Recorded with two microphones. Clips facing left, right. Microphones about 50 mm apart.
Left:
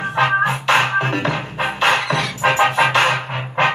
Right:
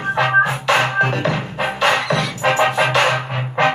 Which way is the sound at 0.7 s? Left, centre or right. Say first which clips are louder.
Even; left.